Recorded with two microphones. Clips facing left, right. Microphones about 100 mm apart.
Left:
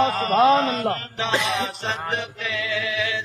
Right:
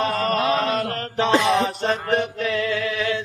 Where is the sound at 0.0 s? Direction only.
45° right (ahead or behind).